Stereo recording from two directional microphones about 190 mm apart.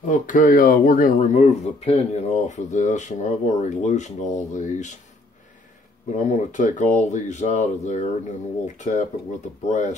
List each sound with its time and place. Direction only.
0.1 s speech: 45° left (ahead or behind)
6.1 s speech: 40° left (ahead or behind)